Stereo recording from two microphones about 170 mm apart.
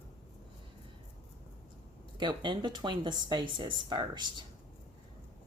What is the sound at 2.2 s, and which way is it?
Speech, 25° right (ahead or behind).